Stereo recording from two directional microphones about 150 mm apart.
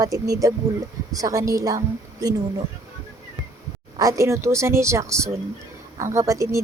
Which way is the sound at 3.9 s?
20° right (ahead or behind).